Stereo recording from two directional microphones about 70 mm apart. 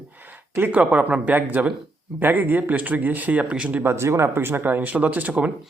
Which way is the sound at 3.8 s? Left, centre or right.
Right.